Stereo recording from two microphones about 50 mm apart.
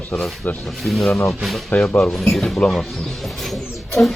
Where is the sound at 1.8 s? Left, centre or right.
Centre.